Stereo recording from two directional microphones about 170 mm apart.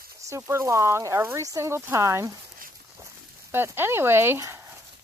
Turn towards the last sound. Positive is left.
turn(degrees=-15)  # may be behind; listen again after turning